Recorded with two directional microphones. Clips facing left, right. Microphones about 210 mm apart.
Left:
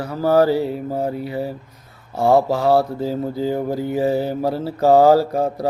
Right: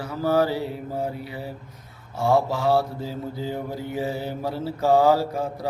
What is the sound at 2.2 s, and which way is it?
Mantra, 40° left (ahead or behind).